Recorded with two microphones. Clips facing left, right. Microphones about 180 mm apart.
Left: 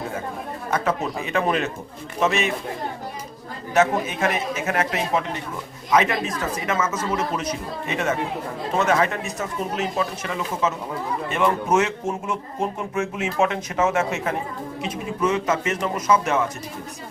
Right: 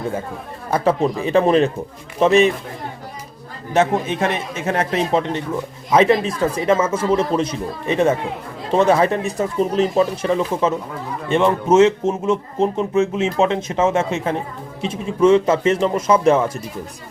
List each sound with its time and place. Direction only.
0.7 s speech: 30° right (ahead or behind)
3.8 s speech: 30° right (ahead or behind)